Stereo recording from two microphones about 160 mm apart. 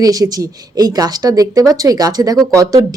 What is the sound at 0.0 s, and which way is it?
A woman's voice, 25° right (ahead or behind).